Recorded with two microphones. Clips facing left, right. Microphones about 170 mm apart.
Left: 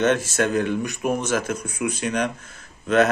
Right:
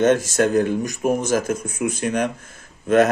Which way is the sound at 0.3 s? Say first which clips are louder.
Right 4 dB; 40° right (ahead or behind).